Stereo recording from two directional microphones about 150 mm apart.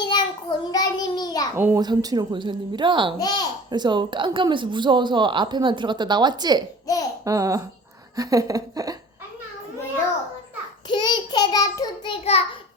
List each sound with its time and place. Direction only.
0.0 s child singing: 30° left (ahead or behind)
1.5 s a child's voice: 15° right (ahead or behind)
1.8 s speech: 25° right (ahead or behind)
3.2 s a child's voice: 25° left (ahead or behind)
3.7 s speech: 30° right (ahead or behind)
7.3 s hiccup: 20° right (ahead or behind)
10.8 s child singing: 30° left (ahead or behind)
12.2 s a child's voice: 40° left (ahead or behind)